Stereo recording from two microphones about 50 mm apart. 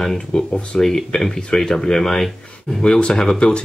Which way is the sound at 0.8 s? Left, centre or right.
Centre.